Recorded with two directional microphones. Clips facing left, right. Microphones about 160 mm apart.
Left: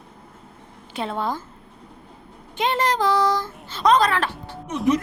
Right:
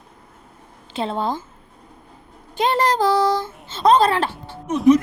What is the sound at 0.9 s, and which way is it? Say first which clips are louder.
Speech: right 3 dB; 25° right (ahead or behind).